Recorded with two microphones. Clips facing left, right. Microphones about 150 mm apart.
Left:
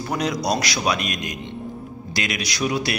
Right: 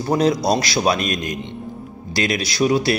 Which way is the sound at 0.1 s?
30° right (ahead or behind).